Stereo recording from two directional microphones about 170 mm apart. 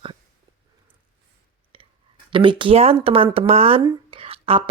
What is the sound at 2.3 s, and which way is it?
A woman's voice, 30° right (ahead or behind).